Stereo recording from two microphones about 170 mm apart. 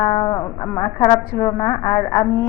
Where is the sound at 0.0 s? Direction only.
25° left (ahead or behind).